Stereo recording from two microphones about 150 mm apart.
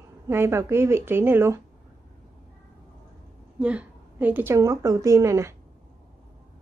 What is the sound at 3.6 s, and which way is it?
A woman's voice, 10° right (ahead or behind).